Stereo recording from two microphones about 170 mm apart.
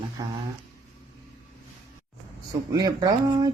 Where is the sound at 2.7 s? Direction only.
20° right (ahead or behind).